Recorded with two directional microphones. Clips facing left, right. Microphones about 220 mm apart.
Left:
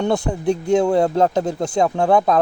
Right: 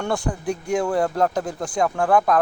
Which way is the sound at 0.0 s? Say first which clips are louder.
Left 5 dB; 20° left (ahead or behind).